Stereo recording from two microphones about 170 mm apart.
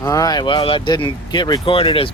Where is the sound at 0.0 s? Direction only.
20° left (ahead or behind).